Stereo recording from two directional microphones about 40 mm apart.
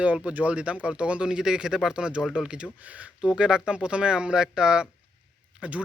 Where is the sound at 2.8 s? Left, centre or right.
Right.